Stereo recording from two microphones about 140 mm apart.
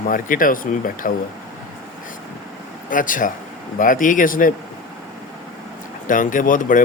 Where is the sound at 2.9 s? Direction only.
75° left (ahead or behind).